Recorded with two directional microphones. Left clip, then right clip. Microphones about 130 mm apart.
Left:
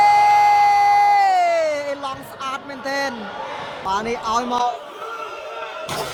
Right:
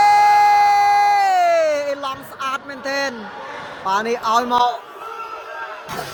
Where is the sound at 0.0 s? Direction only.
25° right (ahead or behind); by 3.1 s 10° right (ahead or behind).